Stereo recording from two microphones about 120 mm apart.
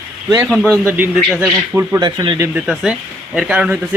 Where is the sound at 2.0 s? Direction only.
35° right (ahead or behind).